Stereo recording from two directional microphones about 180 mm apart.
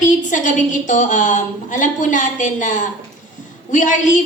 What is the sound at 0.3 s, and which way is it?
A woman's voice, 45° left (ahead or behind).